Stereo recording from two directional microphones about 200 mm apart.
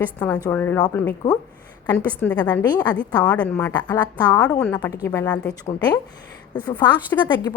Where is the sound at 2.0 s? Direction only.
5° left (ahead or behind).